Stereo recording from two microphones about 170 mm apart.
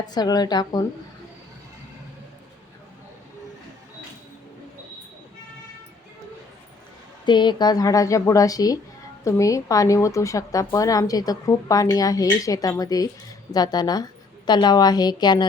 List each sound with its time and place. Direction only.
0.0 s a woman's voice: 25° left (ahead or behind)
7.3 s a woman's voice: 25° left (ahead or behind)